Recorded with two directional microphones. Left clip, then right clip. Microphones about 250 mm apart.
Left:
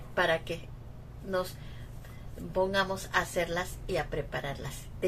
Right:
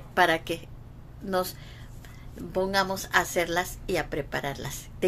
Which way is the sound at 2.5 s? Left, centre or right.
Right.